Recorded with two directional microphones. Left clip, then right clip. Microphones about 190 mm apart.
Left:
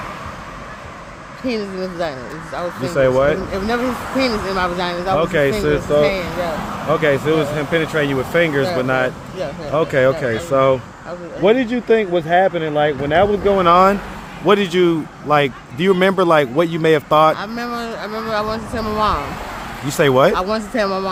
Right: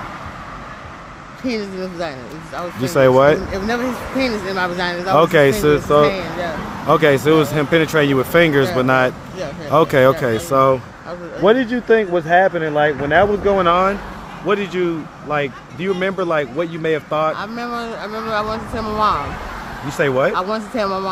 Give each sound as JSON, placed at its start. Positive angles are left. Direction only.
{"t": 1.5, "sound": "speech", "side_deg": 5}
{"t": 2.9, "sound": "speech", "side_deg": -40}
{"t": 4.2, "sound": "speech", "side_deg": 5}
{"t": 5.1, "sound": "speech", "side_deg": -45}
{"t": 6.0, "sound": "speech", "side_deg": 0}
{"t": 6.9, "sound": "speech", "side_deg": -40}
{"t": 11.4, "sound": "speech", "side_deg": 5}
{"t": 13.7, "sound": "speech", "side_deg": 25}
{"t": 14.4, "sound": "a man's voice", "side_deg": 40}
{"t": 17.3, "sound": "speech", "side_deg": 10}
{"t": 20.0, "sound": "speech", "side_deg": 40}
{"t": 20.3, "sound": "speech", "side_deg": 15}